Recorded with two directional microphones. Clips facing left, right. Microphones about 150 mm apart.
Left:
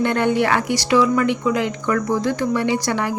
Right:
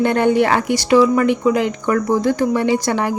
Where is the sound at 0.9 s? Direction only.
30° right (ahead or behind).